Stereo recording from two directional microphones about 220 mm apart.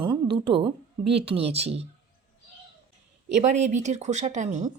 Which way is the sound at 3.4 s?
30° right (ahead or behind).